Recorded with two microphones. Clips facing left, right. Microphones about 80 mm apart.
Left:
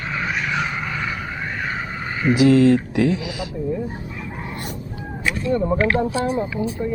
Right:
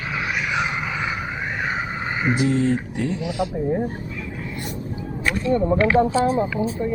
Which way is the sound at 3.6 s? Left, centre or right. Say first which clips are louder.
Even; right.